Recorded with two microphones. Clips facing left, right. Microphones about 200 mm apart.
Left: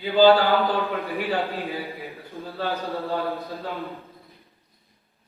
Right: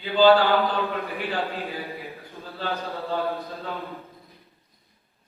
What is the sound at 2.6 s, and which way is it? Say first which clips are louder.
Speech: left 2 dB; 15° left (ahead or behind).